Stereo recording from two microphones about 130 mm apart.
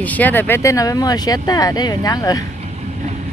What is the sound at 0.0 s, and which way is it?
Speech, 10° left (ahead or behind).